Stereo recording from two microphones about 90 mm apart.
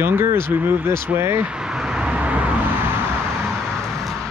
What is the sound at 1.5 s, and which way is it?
Vehicle, 10° right (ahead or behind).